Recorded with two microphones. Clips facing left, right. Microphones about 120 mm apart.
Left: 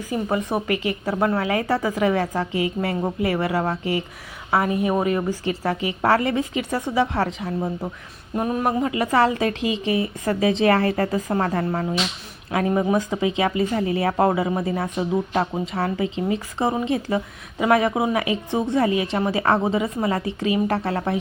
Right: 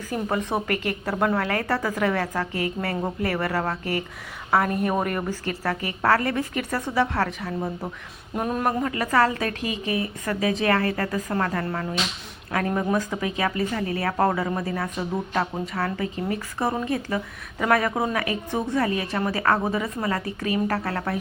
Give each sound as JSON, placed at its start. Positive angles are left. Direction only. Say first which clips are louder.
{"t": 0.1, "sound": "a woman's voice", "louder": "left 2 dB", "side_deg": 10}
{"t": 8.4, "sound": "speech", "louder": "left 2 dB", "side_deg": 5}
{"t": 8.8, "sound": "speech", "louder": "left 3 dB", "side_deg": 20}